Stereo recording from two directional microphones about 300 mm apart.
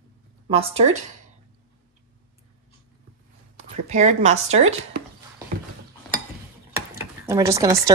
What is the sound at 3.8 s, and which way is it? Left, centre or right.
Speech, right.